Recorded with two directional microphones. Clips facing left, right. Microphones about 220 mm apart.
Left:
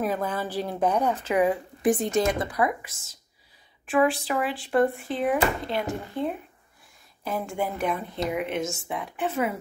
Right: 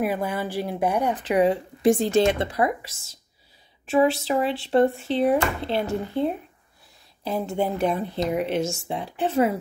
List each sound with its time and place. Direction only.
0.0 s a woman's voice: 10° right (ahead or behind)
3.9 s speech: 25° right (ahead or behind)